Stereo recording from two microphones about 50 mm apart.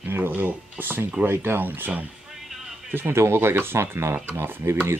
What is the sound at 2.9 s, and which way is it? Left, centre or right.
Speech, right.